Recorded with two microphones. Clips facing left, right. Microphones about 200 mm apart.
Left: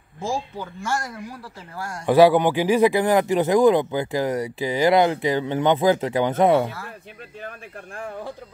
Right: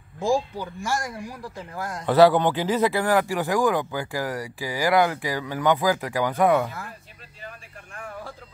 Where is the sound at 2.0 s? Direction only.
10° left (ahead or behind).